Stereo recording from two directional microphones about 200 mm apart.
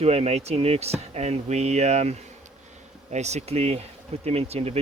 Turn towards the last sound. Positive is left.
turn(degrees=-30)  # may be behind; listen again after turning